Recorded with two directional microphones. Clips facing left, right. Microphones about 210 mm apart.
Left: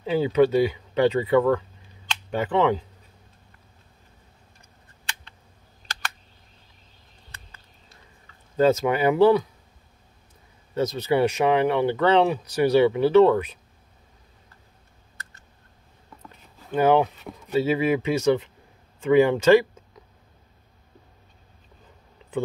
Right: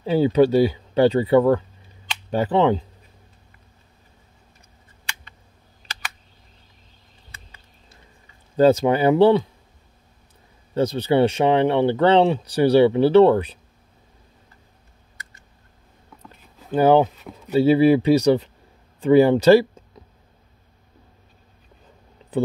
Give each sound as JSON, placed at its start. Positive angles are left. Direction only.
{"t": 0.0, "sound": "speech", "side_deg": -35}
{"t": 8.5, "sound": "speech", "side_deg": -30}
{"t": 10.7, "sound": "speech", "side_deg": -30}
{"t": 16.7, "sound": "speech", "side_deg": -35}